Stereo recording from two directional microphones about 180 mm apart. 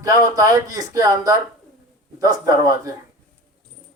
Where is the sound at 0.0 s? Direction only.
20° right (ahead or behind).